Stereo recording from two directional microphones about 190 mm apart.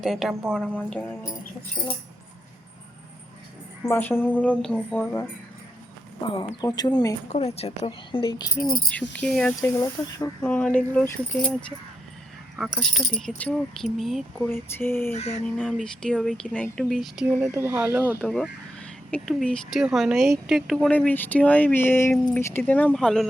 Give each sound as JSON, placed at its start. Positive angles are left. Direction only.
{"t": 0.0, "sound": "speech", "side_deg": 0}
{"t": 3.8, "sound": "speech", "side_deg": 10}
{"t": 6.2, "sound": "speech", "side_deg": 30}
{"t": 7.3, "sound": "a woman's voice", "side_deg": 30}
{"t": 8.6, "sound": "speech", "side_deg": 5}
{"t": 9.6, "sound": "speech", "side_deg": 15}
{"t": 12.5, "sound": "speech", "side_deg": 0}
{"t": 14.3, "sound": "speech", "side_deg": 10}
{"t": 15.1, "sound": "a woman's voice", "side_deg": 35}
{"t": 15.5, "sound": "speech", "side_deg": 5}
{"t": 18.2, "sound": "speech", "side_deg": 5}